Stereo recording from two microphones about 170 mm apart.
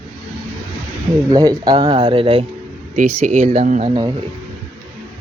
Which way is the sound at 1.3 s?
25° right (ahead or behind).